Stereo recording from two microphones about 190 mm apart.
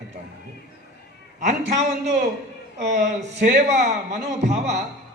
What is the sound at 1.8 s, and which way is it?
Speech, 40° right (ahead or behind).